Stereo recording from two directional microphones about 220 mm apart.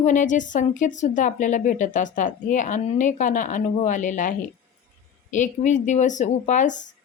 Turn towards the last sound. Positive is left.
turn(degrees=35)  # may be behind; listen again after turning